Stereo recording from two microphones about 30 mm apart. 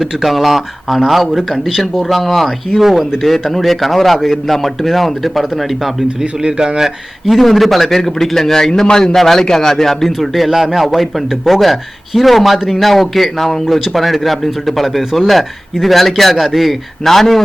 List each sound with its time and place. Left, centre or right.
0.0 s a man's voice: centre
6.4 s speech: right
7.3 s a man's voice: centre
10.1 s speech: centre
10.8 s a man's voice: centre
12.5 s speech: centre
12.8 s a man's voice: centre